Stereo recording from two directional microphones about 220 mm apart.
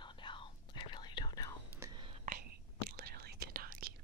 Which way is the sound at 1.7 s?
15° right (ahead or behind).